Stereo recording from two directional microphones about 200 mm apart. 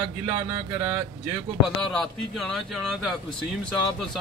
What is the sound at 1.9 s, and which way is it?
A man's voice, centre (ahead or behind).